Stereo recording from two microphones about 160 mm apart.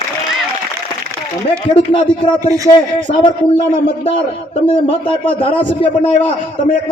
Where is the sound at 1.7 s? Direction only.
30° left (ahead or behind).